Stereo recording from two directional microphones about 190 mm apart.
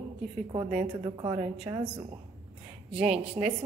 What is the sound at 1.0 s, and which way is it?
Speech, 20° right (ahead or behind).